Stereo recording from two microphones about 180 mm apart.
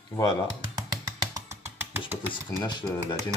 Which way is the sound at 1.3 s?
15° right (ahead or behind).